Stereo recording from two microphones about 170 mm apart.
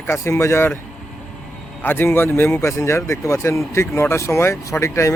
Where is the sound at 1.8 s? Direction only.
10° left (ahead or behind).